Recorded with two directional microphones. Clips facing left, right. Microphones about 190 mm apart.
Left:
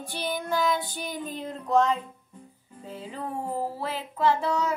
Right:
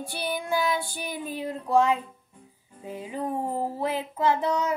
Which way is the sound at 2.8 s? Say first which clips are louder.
Right 4 dB; 15° right (ahead or behind).